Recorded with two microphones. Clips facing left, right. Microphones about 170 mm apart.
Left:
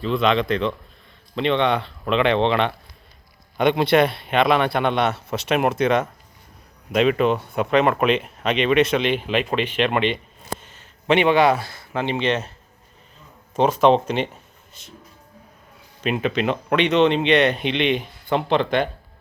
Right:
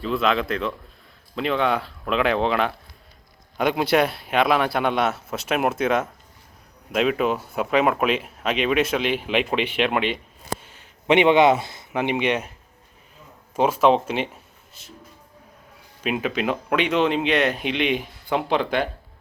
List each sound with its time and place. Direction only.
0.0 s speech: 5° right (ahead or behind)
13.6 s speech: 5° right (ahead or behind)
16.0 s speech: 5° right (ahead or behind)